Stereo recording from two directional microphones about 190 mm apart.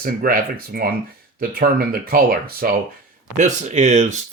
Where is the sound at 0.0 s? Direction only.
50° right (ahead or behind).